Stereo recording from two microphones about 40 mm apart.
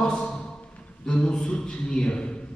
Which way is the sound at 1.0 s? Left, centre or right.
Left.